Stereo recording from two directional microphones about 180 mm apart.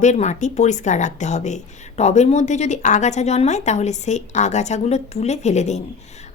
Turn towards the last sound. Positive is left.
turn(degrees=40)  # may be behind; listen again after turning